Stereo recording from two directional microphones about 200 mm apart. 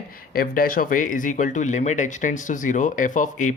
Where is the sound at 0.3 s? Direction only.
45° left (ahead or behind).